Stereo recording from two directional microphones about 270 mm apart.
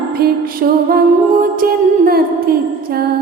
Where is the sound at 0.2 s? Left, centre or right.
Right.